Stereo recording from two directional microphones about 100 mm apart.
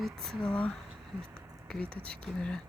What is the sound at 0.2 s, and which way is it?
Speech, 5° left (ahead or behind).